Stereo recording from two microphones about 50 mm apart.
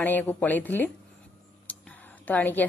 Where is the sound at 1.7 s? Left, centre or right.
Left.